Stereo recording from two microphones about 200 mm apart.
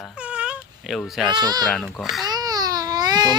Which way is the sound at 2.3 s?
20° right (ahead or behind).